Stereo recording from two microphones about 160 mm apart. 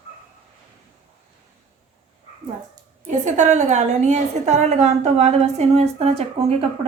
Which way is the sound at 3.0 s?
50° right (ahead or behind).